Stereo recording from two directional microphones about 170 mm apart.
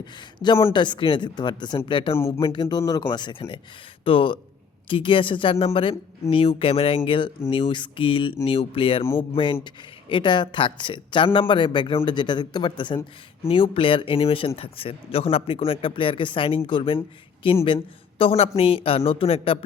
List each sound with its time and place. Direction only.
0.0 s speech: 25° left (ahead or behind)
2.1 s speech: 15° left (ahead or behind)
2.4 s speech: 30° left (ahead or behind)
18.2 s speech: 35° left (ahead or behind)